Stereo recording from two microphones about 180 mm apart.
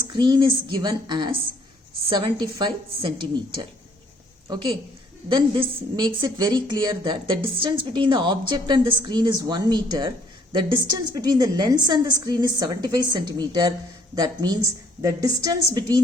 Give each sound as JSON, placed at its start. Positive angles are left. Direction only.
{"t": 0.1, "sound": "a woman's voice", "side_deg": -25}
{"t": 4.4, "sound": "a woman's voice", "side_deg": -25}